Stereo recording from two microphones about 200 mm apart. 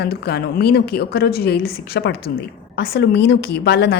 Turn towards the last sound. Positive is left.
turn(degrees=55)  # may be behind; listen again after turning